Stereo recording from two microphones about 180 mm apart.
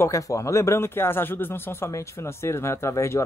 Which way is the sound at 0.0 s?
15° left (ahead or behind).